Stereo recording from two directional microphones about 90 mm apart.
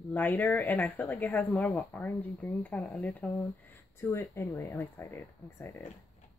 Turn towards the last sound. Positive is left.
turn(degrees=25)  # may be behind; listen again after turning